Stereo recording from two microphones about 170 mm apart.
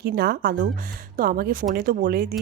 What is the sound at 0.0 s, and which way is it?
A woman's voice, 65° right (ahead or behind).